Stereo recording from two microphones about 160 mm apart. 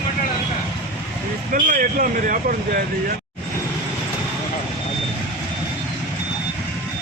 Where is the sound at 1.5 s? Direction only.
55° right (ahead or behind).